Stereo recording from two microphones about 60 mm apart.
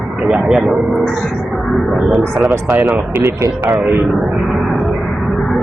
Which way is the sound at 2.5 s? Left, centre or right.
Right.